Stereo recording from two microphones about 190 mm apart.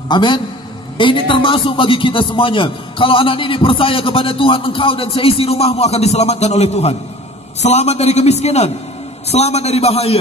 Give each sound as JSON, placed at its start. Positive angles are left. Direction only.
{"t": 0.1, "sound": "a man's voice", "side_deg": 25}